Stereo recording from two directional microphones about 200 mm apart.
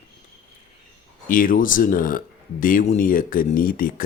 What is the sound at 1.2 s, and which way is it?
Speech, 45° left (ahead or behind).